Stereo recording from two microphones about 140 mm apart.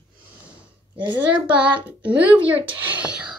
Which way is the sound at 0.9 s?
30° right (ahead or behind).